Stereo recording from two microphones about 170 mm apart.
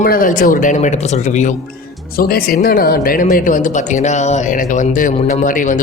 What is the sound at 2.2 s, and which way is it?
Speech, 60° left (ahead or behind).